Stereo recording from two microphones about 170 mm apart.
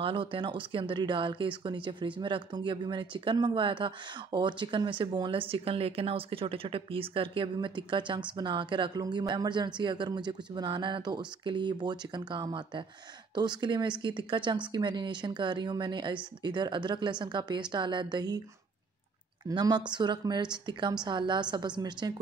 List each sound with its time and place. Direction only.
0.0 s speech: 30° right (ahead or behind)
19.5 s speech: 25° right (ahead or behind)